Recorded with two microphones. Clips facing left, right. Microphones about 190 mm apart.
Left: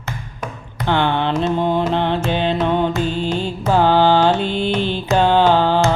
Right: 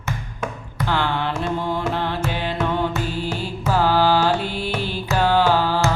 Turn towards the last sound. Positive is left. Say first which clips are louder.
# left 4 dB
turn(degrees=25)  # may be behind; listen again after turning